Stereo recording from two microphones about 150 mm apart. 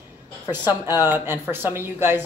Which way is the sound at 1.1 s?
15° right (ahead or behind).